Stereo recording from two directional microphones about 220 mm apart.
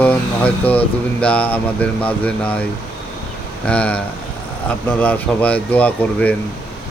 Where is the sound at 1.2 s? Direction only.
5° left (ahead or behind).